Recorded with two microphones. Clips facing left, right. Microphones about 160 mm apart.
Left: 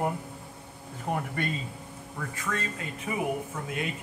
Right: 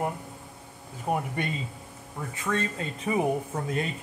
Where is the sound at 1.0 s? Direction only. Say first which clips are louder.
Right 2 dB; 15° right (ahead or behind).